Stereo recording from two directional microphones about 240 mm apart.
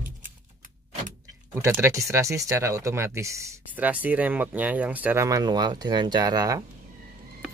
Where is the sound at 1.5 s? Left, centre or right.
Centre.